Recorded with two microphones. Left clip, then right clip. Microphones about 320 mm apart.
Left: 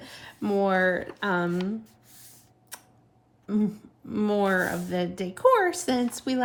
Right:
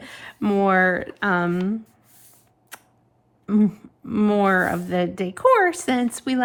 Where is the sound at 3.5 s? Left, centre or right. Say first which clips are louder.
Right 7 dB; right.